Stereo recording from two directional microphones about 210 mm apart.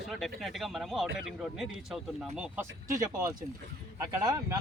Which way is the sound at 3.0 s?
15° right (ahead or behind).